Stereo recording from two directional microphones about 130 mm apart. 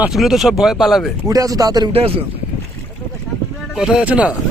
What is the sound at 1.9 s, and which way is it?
Speech, 50° right (ahead or behind).